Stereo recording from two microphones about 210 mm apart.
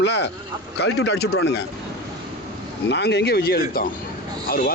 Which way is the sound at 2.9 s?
55° left (ahead or behind).